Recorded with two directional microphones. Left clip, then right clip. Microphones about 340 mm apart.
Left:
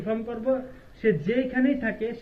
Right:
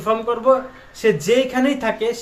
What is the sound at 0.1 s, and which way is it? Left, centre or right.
Speech, right.